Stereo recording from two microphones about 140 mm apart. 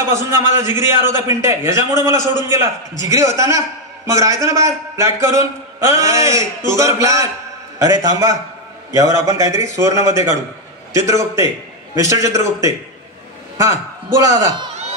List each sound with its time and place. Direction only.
0.0 s a man's voice: 20° right (ahead or behind)